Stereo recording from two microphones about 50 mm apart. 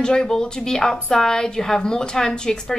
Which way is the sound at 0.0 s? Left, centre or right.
Centre.